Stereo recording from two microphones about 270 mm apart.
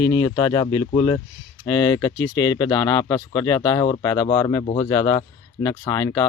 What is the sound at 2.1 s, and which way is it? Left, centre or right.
Speech, left.